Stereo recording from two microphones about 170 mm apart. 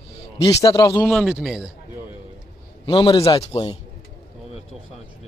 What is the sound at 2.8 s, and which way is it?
Speech, 30° left (ahead or behind).